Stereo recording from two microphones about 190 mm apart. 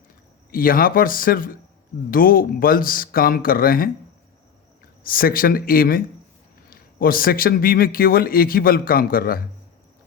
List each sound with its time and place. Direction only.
0.5 s a man's voice: 50° left (ahead or behind)
5.0 s a man's voice: 50° left (ahead or behind)